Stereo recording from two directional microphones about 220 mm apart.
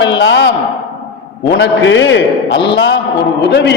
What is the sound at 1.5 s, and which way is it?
A man's voice, 55° left (ahead or behind).